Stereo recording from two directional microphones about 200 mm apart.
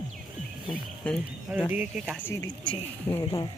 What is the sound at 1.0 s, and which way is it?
Speech, 5° left (ahead or behind).